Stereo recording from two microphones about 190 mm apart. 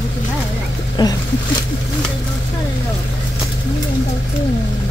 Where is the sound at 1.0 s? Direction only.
20° left (ahead or behind).